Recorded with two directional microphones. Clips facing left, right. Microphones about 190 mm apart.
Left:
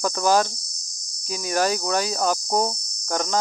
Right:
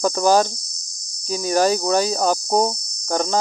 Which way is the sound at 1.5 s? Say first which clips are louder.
Right 5 dB; 30° right (ahead or behind).